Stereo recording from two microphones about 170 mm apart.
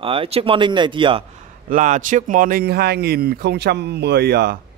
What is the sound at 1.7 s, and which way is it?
A man's voice, 50° right (ahead or behind).